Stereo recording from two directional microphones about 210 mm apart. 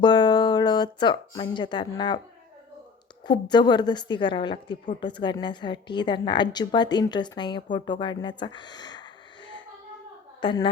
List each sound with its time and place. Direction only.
0.0 s speech: 20° left (ahead or behind)
3.2 s a woman's voice: 20° left (ahead or behind)